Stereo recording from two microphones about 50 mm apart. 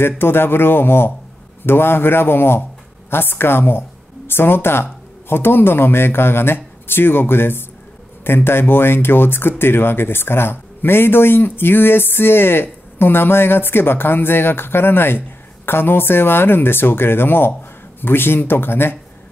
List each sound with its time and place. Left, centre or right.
0.2 s speech: left